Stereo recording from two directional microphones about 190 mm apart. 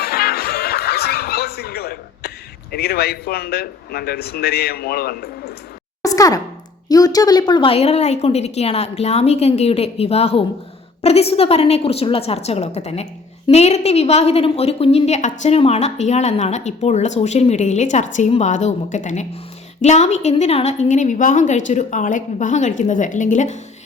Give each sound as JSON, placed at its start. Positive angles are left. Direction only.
{"t": 0.0, "sound": "music", "side_deg": 55}
{"t": 2.7, "sound": "a man's voice", "side_deg": 55}
{"t": 6.0, "sound": "a woman's voice", "side_deg": 20}